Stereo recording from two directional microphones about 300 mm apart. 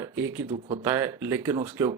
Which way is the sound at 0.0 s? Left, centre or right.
Centre.